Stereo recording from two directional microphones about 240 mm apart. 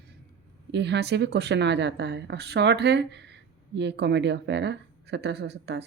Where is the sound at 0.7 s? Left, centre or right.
Right.